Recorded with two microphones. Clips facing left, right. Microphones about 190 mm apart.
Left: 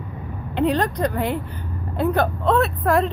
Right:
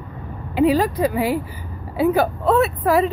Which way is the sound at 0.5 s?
5° right (ahead or behind).